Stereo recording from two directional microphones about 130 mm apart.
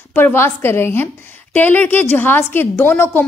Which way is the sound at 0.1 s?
15° left (ahead or behind).